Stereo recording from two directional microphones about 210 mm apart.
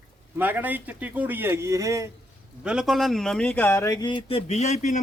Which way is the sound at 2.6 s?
5° right (ahead or behind).